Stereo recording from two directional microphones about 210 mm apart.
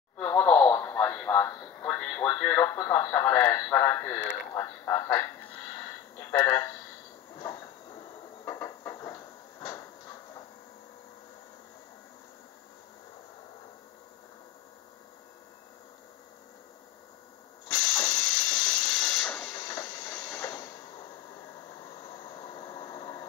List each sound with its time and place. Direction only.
0.2 s radio: 10° left (ahead or behind)
4.6 s a man's voice: 10° left (ahead or behind)
8.5 s a sound: 15° left (ahead or behind)
17.6 s hiss: 10° left (ahead or behind)
22.2 s vehicle: 20° left (ahead or behind)